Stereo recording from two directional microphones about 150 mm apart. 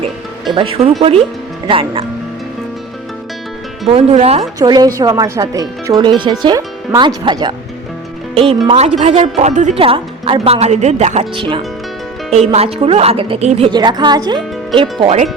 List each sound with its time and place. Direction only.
0.5 s speech: 40° right (ahead or behind)
3.9 s speech: 45° right (ahead or behind)
4.6 s speech: 25° right (ahead or behind)
8.4 s speech: 40° right (ahead or behind)
9.7 s speech: 40° right (ahead or behind)
11.3 s speech: 35° right (ahead or behind)
12.3 s speech: 45° right (ahead or behind)
13.7 s speech: 30° right (ahead or behind)